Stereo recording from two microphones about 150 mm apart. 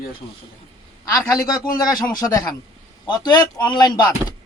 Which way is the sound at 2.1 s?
25° left (ahead or behind).